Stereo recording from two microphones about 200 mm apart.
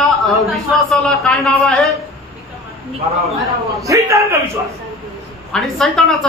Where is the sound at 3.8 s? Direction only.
15° right (ahead or behind).